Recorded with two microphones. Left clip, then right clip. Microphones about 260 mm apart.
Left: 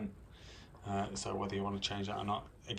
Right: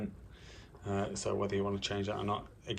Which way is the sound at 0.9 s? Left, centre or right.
Centre.